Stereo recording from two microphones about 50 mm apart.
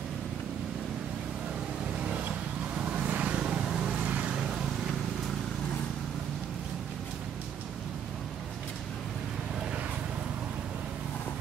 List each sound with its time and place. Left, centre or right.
2.8 s vehicle: centre
3.1 s vehicle: right
3.6 s vehicle: centre
4.0 s vehicle: right